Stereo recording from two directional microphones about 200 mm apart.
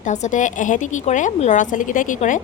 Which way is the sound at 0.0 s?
35° left (ahead or behind).